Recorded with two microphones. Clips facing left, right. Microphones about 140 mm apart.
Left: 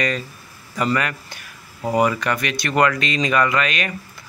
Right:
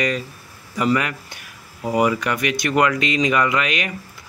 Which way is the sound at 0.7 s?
15° right (ahead or behind).